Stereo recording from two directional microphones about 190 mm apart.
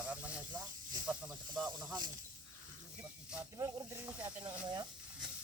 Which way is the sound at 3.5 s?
20° right (ahead or behind).